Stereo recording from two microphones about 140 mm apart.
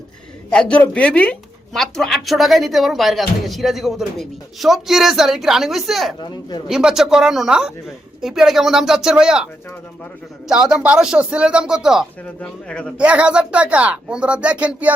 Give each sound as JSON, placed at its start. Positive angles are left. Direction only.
{"t": 0.5, "sound": "speech", "side_deg": 10}
{"t": 6.1, "sound": "a woman's voice", "side_deg": 30}
{"t": 6.7, "sound": "speech", "side_deg": -5}
{"t": 10.5, "sound": "speech", "side_deg": -5}
{"t": 12.2, "sound": "speech", "side_deg": 5}
{"t": 13.0, "sound": "speech", "side_deg": -10}